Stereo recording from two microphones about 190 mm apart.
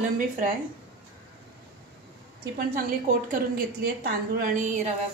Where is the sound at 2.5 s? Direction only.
45° right (ahead or behind).